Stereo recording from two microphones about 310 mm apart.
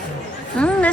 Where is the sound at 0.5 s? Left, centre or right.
Centre.